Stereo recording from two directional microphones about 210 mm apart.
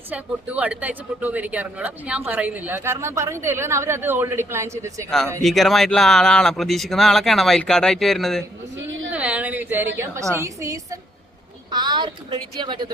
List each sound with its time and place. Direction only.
0.1 s speech: 5° right (ahead or behind)
5.4 s speech: centre (ahead or behind); by 12.9 s 20° right (ahead or behind)